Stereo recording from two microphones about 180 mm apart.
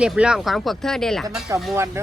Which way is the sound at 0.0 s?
5° right (ahead or behind).